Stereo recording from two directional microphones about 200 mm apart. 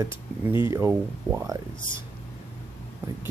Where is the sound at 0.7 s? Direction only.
15° right (ahead or behind).